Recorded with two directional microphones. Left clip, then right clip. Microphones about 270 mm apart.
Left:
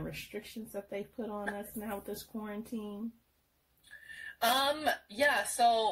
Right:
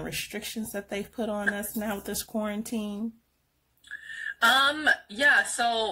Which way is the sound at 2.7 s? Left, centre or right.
Right.